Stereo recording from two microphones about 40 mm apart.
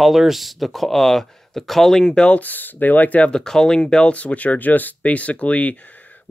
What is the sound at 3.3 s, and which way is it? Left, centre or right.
Speech, centre.